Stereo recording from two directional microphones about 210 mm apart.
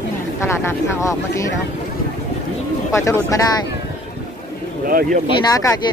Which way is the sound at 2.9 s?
15° left (ahead or behind).